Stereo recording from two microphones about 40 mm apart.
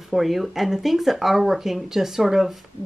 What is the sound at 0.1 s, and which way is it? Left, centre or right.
Speech, centre.